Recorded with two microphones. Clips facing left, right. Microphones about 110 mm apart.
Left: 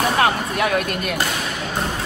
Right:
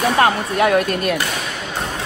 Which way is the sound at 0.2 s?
35° right (ahead or behind).